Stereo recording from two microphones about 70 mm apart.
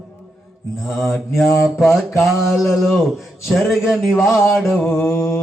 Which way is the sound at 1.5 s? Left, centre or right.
Left.